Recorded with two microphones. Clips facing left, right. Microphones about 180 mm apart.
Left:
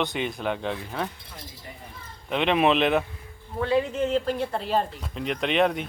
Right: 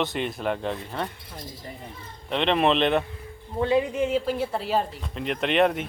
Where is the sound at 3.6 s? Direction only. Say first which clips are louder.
Right 1 dB; 20° right (ahead or behind); by 5.9 s centre (ahead or behind).